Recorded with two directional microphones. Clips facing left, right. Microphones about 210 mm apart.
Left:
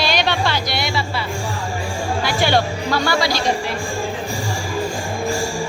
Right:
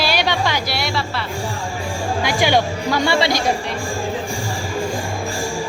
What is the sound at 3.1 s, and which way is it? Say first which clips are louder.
Speech: right 3 dB; 25° right (ahead or behind).